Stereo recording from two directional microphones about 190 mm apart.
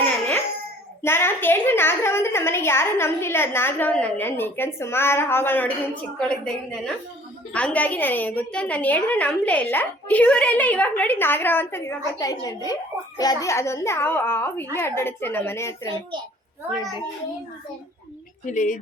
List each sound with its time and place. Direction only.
1.0 s a woman's voice: 10° left (ahead or behind)
18.4 s speech: 45° left (ahead or behind)